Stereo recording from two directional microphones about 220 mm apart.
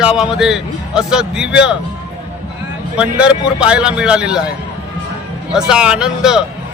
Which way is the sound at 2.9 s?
5° right (ahead or behind).